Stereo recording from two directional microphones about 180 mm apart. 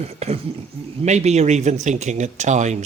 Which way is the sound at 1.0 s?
40° right (ahead or behind).